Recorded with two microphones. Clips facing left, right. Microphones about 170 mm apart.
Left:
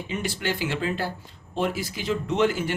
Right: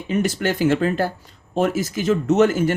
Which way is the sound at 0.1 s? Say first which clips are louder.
Right 8 dB; 45° right (ahead or behind).